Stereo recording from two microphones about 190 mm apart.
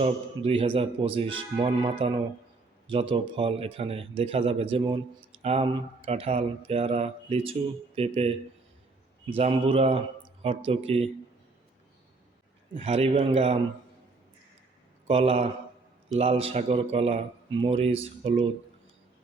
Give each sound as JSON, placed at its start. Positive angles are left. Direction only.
{"t": 0.0, "sound": "speech", "side_deg": -30}
{"t": 12.7, "sound": "speech", "side_deg": -30}
{"t": 15.0, "sound": "a man's voice", "side_deg": -30}